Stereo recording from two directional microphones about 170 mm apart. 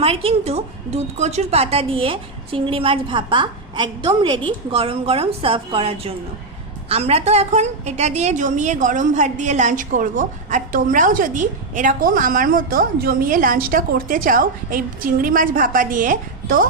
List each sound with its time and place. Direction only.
0.0 s a woman's voice: 35° right (ahead or behind); by 16.6 s 55° right (ahead or behind)